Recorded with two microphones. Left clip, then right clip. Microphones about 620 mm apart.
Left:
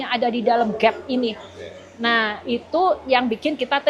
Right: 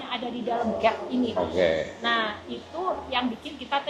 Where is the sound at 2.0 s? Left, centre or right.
Left.